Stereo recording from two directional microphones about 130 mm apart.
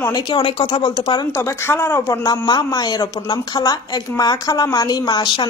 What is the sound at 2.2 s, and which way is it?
Speech, 30° left (ahead or behind).